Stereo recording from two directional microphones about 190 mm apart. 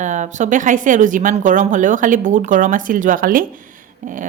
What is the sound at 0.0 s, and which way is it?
Speech, 40° right (ahead or behind).